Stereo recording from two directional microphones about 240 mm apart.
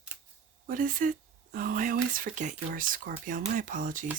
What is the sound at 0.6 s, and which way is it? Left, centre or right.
Speech, right.